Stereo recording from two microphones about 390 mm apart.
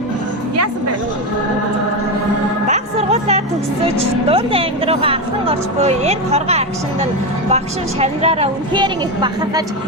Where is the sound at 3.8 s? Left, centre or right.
Centre.